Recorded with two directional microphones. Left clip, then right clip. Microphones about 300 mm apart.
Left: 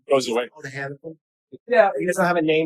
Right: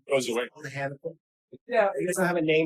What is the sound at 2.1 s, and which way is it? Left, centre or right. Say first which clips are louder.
Speech: left 5 dB; centre.